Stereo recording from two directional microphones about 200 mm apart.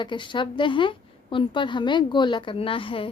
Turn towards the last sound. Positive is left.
turn(degrees=25)  # may be behind; listen again after turning